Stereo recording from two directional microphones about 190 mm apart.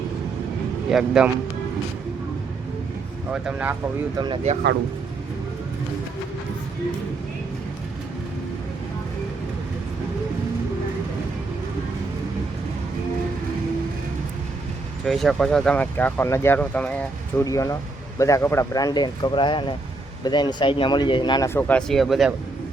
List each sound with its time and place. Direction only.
0.9 s speech: 5° right (ahead or behind)
3.3 s speech: 5° right (ahead or behind)
15.0 s speech: centre (ahead or behind)
17.4 s speech: 20° left (ahead or behind); by 22.3 s centre (ahead or behind)